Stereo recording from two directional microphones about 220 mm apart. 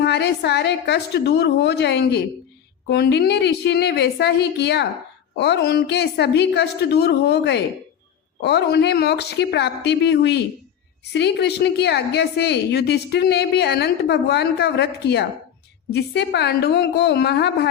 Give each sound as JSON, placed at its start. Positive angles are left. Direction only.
{"t": 0.0, "sound": "a woman's voice", "side_deg": 50}